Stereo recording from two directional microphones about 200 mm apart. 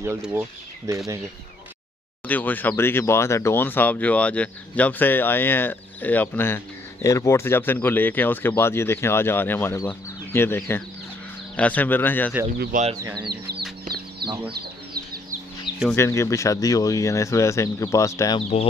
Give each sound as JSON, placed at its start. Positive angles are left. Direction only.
{"t": 0.0, "sound": "speech", "side_deg": -10}
{"t": 2.2, "sound": "speech", "side_deg": 10}
{"t": 12.9, "sound": "speech", "side_deg": -20}
{"t": 13.3, "sound": "speech", "side_deg": -50}
{"t": 14.2, "sound": "chicken", "side_deg": -50}
{"t": 15.9, "sound": "speech", "side_deg": 15}